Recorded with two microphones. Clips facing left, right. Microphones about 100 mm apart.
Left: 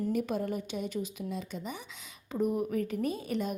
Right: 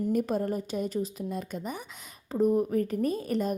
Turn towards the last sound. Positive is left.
turn(degrees=-40)  # may be behind; listen again after turning